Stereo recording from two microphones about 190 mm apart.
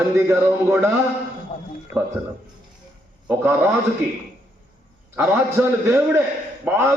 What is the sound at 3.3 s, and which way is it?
Speech, 10° right (ahead or behind).